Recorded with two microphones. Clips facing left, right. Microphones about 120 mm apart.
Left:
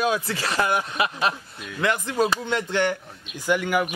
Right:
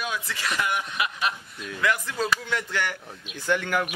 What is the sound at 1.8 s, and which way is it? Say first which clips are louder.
Speech: left 4 dB; 25° left (ahead or behind).